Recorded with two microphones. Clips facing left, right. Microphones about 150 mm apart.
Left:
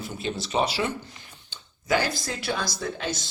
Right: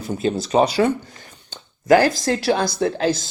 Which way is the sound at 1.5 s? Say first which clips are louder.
Right 11 dB; 50° right (ahead or behind).